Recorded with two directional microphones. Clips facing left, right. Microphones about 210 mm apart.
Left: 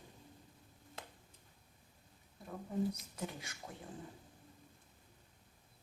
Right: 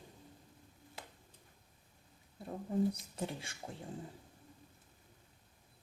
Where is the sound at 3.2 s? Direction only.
30° right (ahead or behind).